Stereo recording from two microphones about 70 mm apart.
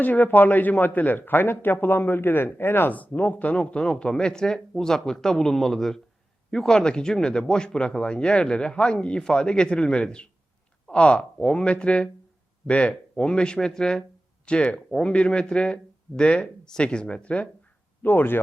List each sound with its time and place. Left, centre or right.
0.0 s a man's voice: left
18.0 s a man's voice: left